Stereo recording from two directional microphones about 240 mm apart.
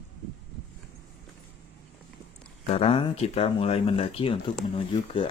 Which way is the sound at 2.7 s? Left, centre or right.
Left.